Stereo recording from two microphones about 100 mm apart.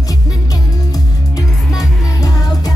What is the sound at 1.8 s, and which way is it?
Music, 40° left (ahead or behind).